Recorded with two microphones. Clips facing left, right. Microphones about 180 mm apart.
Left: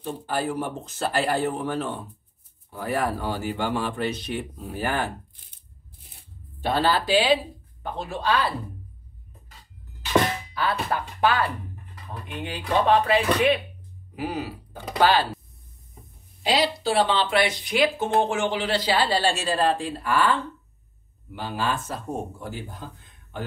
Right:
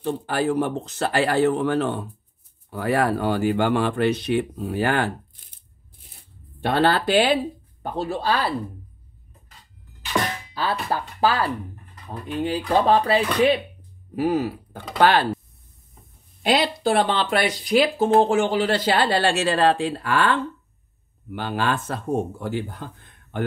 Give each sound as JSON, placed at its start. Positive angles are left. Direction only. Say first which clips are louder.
{"t": 0.0, "sound": "speech", "louder": "right 4 dB", "side_deg": -75}
{"t": 6.6, "sound": "speech", "louder": "right 3 dB", "side_deg": -60}
{"t": 7.8, "sound": "speech", "louder": "right 3 dB", "side_deg": -35}
{"t": 10.5, "sound": "speech", "louder": "right 1 dB", "side_deg": -30}
{"t": 14.1, "sound": "speech", "louder": "right 8 dB", "side_deg": -45}
{"t": 16.4, "sound": "speech", "louder": "right 3 dB", "side_deg": -55}
{"t": 21.4, "sound": "speech", "louder": "right 3 dB", "side_deg": -70}